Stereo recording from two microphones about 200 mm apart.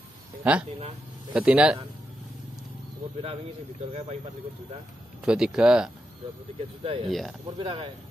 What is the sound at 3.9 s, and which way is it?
Speech, 30° right (ahead or behind).